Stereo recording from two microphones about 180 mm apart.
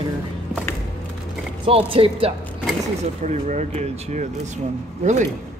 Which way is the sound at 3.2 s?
40° right (ahead or behind).